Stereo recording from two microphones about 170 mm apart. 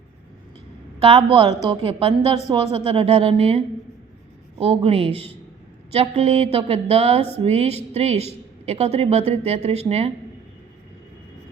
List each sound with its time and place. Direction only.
0.9 s a woman's voice: 35° right (ahead or behind)